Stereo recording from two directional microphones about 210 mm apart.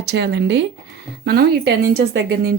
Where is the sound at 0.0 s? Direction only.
50° right (ahead or behind).